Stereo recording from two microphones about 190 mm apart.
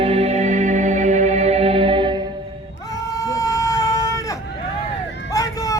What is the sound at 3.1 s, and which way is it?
Vehicle, 15° left (ahead or behind).